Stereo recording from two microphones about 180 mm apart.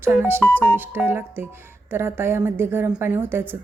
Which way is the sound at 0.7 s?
10° right (ahead or behind).